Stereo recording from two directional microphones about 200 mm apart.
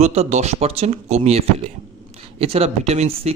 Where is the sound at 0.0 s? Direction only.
35° right (ahead or behind).